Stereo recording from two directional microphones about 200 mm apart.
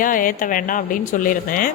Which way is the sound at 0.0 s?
40° left (ahead or behind).